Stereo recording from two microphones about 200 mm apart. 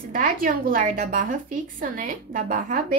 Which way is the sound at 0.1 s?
45° right (ahead or behind).